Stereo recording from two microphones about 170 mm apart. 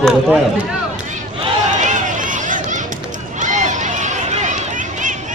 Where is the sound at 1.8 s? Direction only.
50° right (ahead or behind).